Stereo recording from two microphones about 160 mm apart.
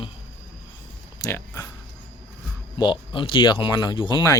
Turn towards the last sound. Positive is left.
turn(degrees=30)  # may be behind; listen again after turning